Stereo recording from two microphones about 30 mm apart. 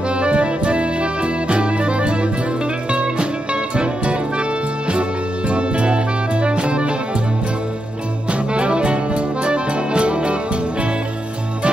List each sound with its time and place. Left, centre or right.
0.1 s music: right
8.3 s music: right